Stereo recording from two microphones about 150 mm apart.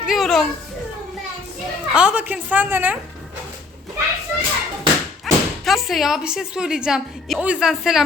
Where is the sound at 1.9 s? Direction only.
5° right (ahead or behind).